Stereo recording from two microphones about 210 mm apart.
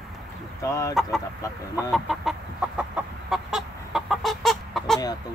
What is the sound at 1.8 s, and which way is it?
Chicken, centre (ahead or behind).